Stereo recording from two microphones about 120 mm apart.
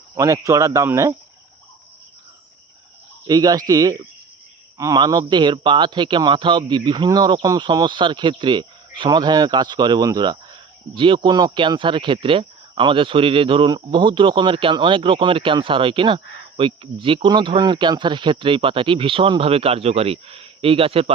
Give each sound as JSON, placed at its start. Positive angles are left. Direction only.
{"t": 0.2, "sound": "a man's voice", "side_deg": -25}
{"t": 3.2, "sound": "a man's voice", "side_deg": -35}